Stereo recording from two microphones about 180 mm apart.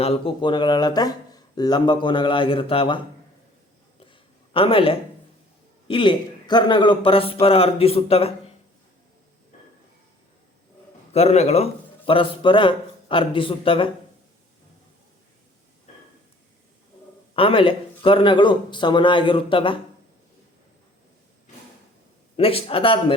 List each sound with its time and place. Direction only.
0.0 s speech: 30° left (ahead or behind)
4.0 s a sound: 30° left (ahead or behind)
5.9 s a man's voice: 25° left (ahead or behind)
11.1 s speech: 35° left (ahead or behind)
17.3 s speech: 30° left (ahead or behind)
22.4 s a man's voice: 30° left (ahead or behind)